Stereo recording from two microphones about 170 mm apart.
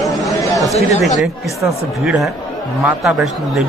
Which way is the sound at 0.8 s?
40° left (ahead or behind).